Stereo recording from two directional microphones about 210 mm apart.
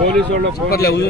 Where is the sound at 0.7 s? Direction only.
45° left (ahead or behind).